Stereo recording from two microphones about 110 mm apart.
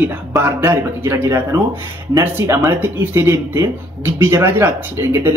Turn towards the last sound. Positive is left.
turn(degrees=-25)  # may be behind; listen again after turning